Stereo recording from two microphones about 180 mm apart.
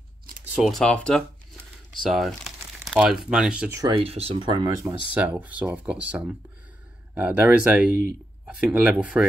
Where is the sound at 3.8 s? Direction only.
30° right (ahead or behind).